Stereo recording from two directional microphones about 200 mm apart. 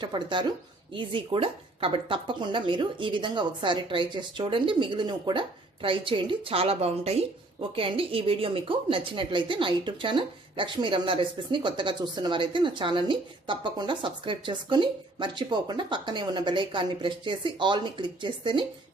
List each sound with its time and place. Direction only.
0.0 s speech: 25° right (ahead or behind)